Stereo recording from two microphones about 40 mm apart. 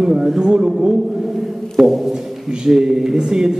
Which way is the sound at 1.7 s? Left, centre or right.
Centre.